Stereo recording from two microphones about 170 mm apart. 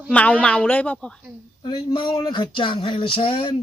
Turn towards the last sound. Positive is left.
turn(degrees=30)  # may be behind; listen again after turning